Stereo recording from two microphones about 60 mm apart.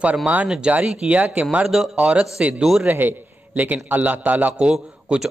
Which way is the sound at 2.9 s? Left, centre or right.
Right.